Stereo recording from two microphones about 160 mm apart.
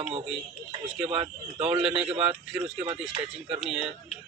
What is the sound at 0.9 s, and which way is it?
Speech, 5° right (ahead or behind).